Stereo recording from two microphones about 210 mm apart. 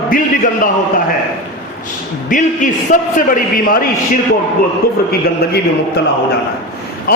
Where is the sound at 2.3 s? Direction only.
40° left (ahead or behind).